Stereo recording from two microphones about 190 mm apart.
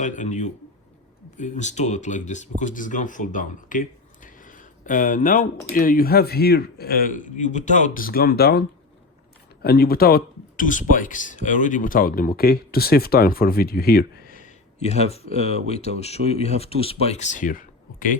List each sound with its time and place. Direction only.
0.0 s speech: 40° left (ahead or behind)
14.3 s speech: 40° left (ahead or behind)